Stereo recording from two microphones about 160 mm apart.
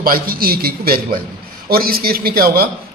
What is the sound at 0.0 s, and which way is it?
A man's voice, 65° right (ahead or behind).